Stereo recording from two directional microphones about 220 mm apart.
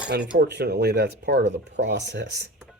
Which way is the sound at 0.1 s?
50° right (ahead or behind).